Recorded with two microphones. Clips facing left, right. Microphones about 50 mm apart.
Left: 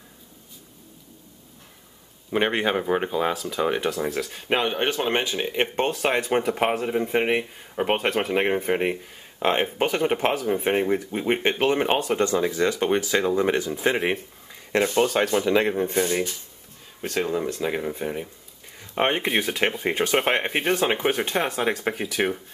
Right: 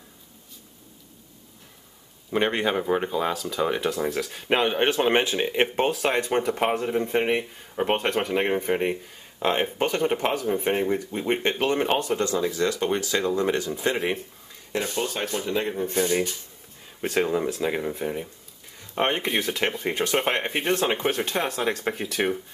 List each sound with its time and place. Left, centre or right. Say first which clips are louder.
2.3 s speech: left 1 dB; centre
14.7 s speech: left 7 dB; left
15.7 s speech: left 2 dB; left
17.0 s speech: right 2 dB; centre